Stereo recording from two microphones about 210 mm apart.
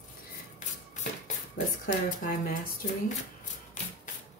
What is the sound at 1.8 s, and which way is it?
Speech, 40° left (ahead or behind).